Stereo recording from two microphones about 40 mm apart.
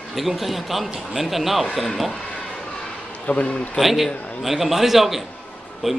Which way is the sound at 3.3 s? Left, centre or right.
Left.